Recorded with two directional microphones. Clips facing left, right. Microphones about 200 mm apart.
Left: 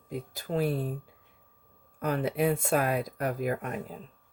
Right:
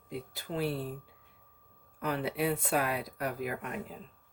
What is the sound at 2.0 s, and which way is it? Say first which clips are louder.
Speech: left 4 dB; 45° left (ahead or behind).